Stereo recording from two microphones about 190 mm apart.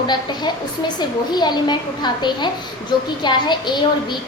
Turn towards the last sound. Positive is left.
turn(degrees=25)  # may be behind; listen again after turning